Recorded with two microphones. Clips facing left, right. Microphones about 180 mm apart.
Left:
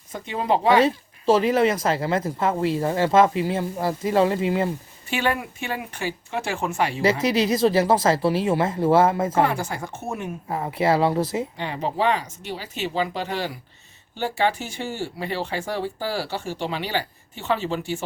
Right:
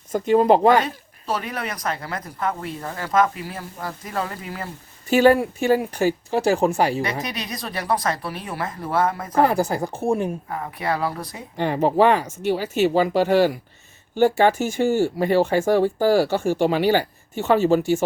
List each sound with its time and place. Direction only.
0.1 s speech: 45° right (ahead or behind)
0.9 s speech: 25° left (ahead or behind)
5.0 s speech: 40° right (ahead or behind)
7.0 s speech: 25° left (ahead or behind)
9.4 s speech: 35° right (ahead or behind)
10.5 s speech: 25° left (ahead or behind)
11.5 s speech: 50° right (ahead or behind)